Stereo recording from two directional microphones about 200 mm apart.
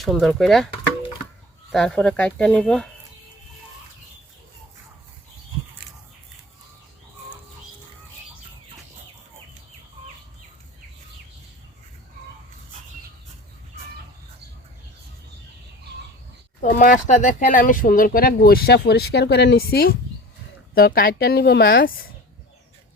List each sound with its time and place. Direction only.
0.0 s speech: centre (ahead or behind)
1.7 s speech: centre (ahead or behind)
16.6 s speech: 40° left (ahead or behind)